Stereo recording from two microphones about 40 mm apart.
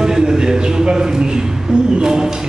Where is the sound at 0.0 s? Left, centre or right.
Centre.